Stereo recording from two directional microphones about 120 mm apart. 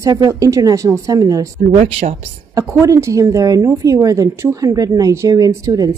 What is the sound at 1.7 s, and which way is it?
Speech, 60° right (ahead or behind).